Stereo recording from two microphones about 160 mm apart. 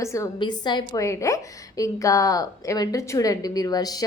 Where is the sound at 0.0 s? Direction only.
20° left (ahead or behind).